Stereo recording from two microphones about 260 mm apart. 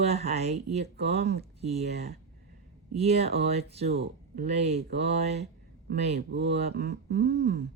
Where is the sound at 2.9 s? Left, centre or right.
Right.